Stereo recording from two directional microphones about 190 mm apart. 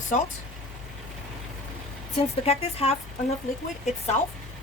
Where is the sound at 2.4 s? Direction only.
30° left (ahead or behind).